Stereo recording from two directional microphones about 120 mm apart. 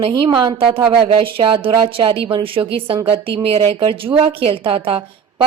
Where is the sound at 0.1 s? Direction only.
35° right (ahead or behind).